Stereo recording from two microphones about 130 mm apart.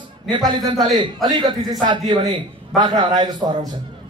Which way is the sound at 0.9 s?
35° right (ahead or behind).